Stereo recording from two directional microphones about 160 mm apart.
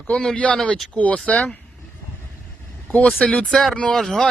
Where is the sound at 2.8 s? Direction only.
10° left (ahead or behind).